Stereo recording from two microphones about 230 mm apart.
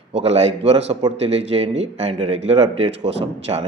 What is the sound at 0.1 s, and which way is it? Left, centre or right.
A man's voice, right.